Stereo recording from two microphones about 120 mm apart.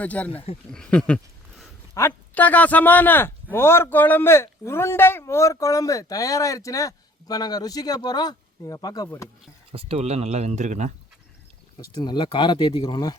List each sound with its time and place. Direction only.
0.0 s a sound: 10° left (ahead or behind)
2.0 s speech: 15° left (ahead or behind); by 9.0 s 30° left (ahead or behind)
9.7 s speech: 60° right (ahead or behind); by 10.9 s 80° right
11.8 s speech: 35° left (ahead or behind)